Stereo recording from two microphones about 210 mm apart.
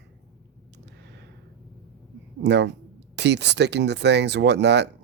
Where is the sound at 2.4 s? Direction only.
55° right (ahead or behind).